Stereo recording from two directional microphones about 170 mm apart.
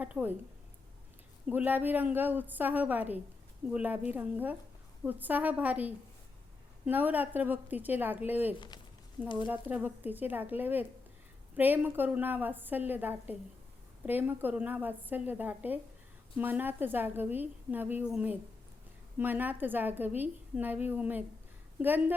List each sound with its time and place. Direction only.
0.0 s a woman's voice: 10° right (ahead or behind)
1.5 s a woman's voice: 10° right (ahead or behind)
8.5 s speech: 25° left (ahead or behind)
9.5 s a woman's voice: 10° right (ahead or behind)